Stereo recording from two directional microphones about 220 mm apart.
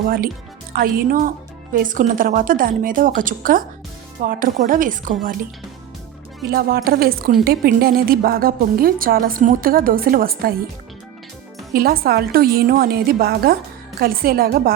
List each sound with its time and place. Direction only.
0.7 s a woman's voice: 40° right (ahead or behind)
6.5 s a woman's voice: 40° right (ahead or behind)
11.7 s a woman's voice: 45° right (ahead or behind)